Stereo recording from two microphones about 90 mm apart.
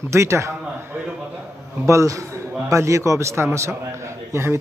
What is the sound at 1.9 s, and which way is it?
A man's voice, 35° right (ahead or behind).